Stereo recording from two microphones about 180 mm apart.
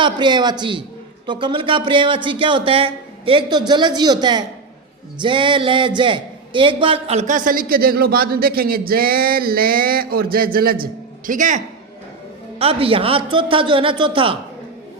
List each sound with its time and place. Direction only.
0.0 s a man's voice: 25° right (ahead or behind); by 11.6 s 45° right (ahead or behind)
12.5 s speech: 30° right (ahead or behind)